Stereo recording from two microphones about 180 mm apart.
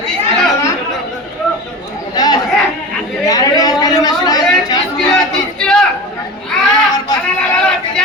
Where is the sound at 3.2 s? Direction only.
20° left (ahead or behind).